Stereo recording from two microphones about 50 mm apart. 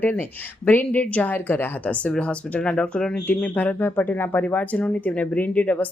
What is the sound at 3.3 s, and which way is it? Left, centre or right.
A woman's voice, left.